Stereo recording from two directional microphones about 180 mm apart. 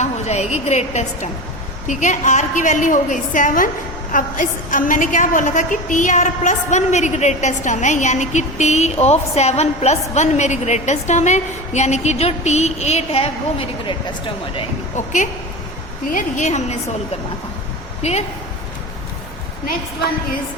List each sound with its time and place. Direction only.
0.0 s a woman's voice: 40° left (ahead or behind)
14.9 s a woman's voice: 45° left (ahead or behind)